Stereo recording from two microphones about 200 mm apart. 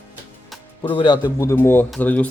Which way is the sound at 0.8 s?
25° left (ahead or behind).